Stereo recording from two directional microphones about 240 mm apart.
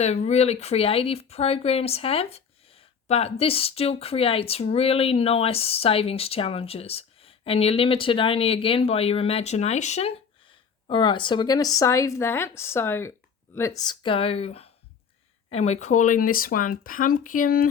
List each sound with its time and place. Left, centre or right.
0.0 s speech: left